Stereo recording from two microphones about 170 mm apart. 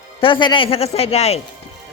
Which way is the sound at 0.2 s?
30° left (ahead or behind).